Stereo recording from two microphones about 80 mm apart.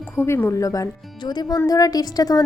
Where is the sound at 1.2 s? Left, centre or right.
Left.